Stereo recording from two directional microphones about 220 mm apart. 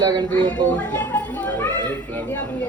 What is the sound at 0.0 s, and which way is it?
Speech, 20° right (ahead or behind).